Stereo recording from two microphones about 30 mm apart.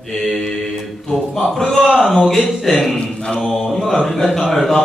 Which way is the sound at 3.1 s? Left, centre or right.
Left.